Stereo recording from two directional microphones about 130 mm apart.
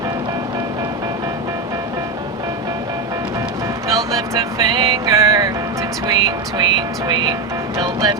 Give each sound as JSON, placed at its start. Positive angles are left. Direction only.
{"t": 3.8, "sound": "music", "side_deg": -25}